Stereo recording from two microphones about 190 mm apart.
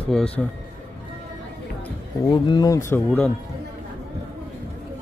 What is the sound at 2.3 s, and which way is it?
Speech, 20° left (ahead or behind).